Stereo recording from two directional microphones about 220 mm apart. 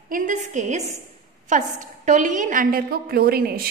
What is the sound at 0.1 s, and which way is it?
A woman's voice, 35° right (ahead or behind).